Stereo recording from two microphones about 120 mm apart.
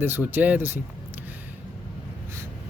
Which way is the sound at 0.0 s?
15° right (ahead or behind).